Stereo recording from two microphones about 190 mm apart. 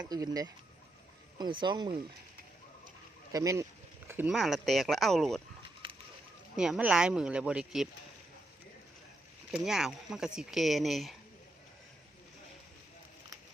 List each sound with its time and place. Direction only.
0.0 s speech: 20° right (ahead or behind)
3.3 s speech: 15° right (ahead or behind); by 5.4 s centre (ahead or behind)
6.6 s speech: 5° right (ahead or behind)
9.5 s speech: 5° right (ahead or behind)